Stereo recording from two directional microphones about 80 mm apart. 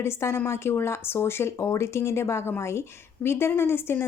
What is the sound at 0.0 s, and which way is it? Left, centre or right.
Speech, left.